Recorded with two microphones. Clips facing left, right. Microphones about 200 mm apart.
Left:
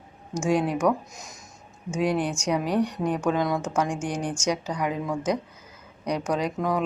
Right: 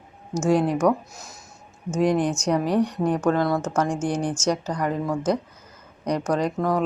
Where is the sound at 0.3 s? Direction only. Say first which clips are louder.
Right 3 dB; 10° left (ahead or behind).